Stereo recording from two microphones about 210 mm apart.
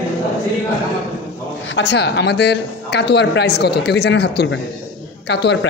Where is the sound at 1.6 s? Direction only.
60° left (ahead or behind).